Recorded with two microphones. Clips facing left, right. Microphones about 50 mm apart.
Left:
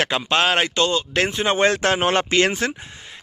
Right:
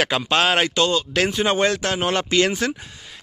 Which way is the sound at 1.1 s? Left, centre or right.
Left.